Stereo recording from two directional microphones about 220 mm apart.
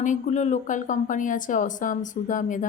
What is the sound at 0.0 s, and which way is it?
Speech, 35° left (ahead or behind).